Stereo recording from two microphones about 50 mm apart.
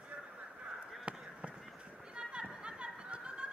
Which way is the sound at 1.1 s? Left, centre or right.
Right.